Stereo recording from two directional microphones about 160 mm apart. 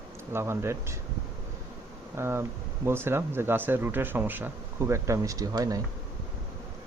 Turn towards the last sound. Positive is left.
turn(degrees=-25)  # may be behind; listen again after turning